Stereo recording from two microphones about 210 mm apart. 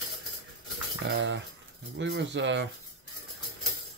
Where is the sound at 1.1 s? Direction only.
55° right (ahead or behind).